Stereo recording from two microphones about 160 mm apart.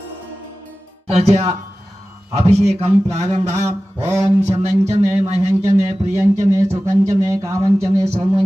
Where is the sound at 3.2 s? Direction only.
20° right (ahead or behind).